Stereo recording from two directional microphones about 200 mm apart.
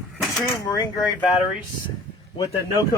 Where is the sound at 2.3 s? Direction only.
25° left (ahead or behind).